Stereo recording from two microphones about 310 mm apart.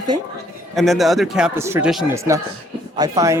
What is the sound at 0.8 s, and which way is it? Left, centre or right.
A man's voice, centre.